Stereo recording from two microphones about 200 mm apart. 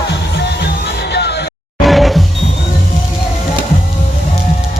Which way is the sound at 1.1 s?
55° left (ahead or behind).